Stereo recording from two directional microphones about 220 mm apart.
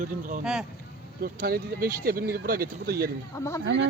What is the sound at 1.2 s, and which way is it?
Speech, 45° right (ahead or behind).